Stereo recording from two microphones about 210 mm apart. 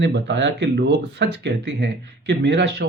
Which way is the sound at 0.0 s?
55° right (ahead or behind).